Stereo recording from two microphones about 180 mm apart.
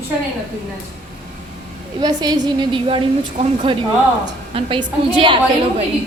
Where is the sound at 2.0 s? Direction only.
20° right (ahead or behind).